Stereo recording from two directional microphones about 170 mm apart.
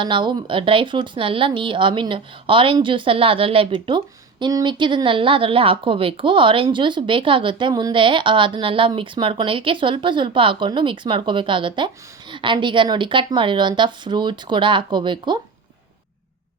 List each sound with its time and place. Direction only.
0.0 s speech: 25° right (ahead or behind)